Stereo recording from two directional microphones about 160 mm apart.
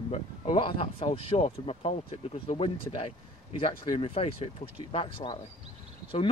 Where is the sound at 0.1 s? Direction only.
35° left (ahead or behind).